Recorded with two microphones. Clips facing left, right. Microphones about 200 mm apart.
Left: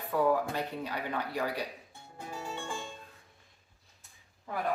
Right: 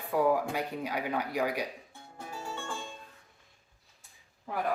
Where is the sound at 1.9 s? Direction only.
15° left (ahead or behind).